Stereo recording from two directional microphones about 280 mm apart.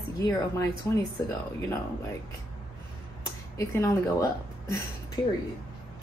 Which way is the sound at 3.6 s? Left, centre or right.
Centre.